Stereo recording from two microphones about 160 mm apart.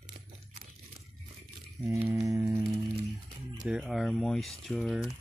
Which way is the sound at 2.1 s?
20° right (ahead or behind).